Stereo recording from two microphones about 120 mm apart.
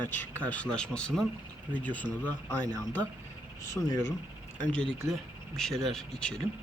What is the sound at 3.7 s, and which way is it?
Speech, 25° left (ahead or behind).